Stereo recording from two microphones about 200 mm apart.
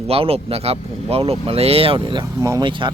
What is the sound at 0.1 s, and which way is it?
Speech, 30° right (ahead or behind).